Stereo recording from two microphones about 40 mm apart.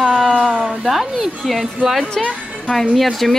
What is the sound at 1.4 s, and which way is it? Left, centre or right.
Speech, centre.